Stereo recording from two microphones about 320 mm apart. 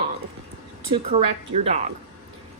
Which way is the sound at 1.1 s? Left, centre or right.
Centre.